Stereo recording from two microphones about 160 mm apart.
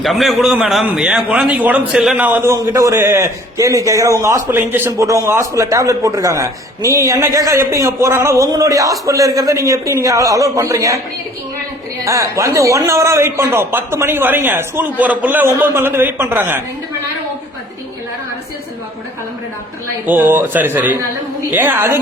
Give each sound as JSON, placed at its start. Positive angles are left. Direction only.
{"t": 0.0, "sound": "a man's voice", "side_deg": 0}
{"t": 12.0, "sound": "speech", "side_deg": -20}
{"t": 20.1, "sound": "speech", "side_deg": -10}